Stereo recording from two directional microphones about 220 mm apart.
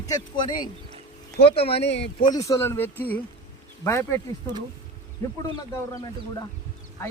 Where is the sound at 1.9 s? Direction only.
50° left (ahead or behind).